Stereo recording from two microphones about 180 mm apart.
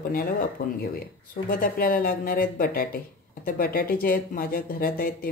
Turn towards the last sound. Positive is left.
turn(degrees=50)  # may be behind; listen again after turning